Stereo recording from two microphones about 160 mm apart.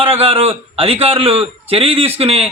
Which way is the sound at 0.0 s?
35° right (ahead or behind).